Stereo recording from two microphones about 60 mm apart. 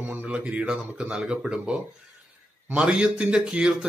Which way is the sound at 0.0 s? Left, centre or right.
Right.